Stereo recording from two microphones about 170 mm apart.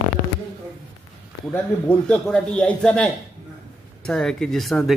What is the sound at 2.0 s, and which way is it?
A man's voice, 5° left (ahead or behind).